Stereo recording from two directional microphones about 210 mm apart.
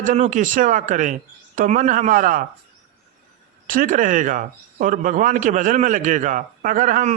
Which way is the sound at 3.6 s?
40° right (ahead or behind).